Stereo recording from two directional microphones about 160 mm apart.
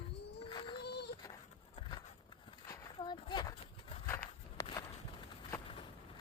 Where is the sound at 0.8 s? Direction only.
90° left.